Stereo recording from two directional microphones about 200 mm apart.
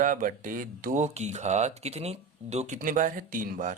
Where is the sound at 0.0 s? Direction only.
40° right (ahead or behind).